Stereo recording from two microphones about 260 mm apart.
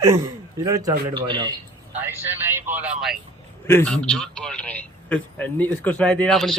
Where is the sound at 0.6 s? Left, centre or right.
Centre.